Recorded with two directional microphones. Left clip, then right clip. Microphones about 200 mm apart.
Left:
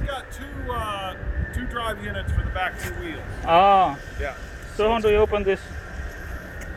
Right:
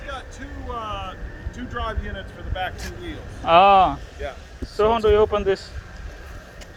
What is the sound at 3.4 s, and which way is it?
Speech, 25° right (ahead or behind).